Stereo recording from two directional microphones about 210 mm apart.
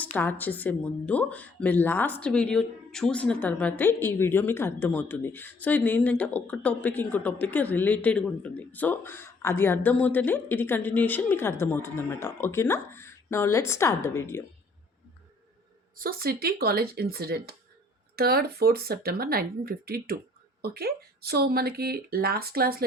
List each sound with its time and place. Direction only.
0.0 s speech: 10° left (ahead or behind)
16.0 s speech: 45° right (ahead or behind)